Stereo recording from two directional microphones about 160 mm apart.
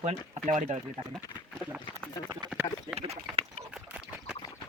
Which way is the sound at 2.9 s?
40° right (ahead or behind).